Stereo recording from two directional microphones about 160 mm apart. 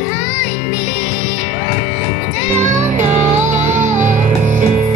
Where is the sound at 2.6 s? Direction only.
50° right (ahead or behind).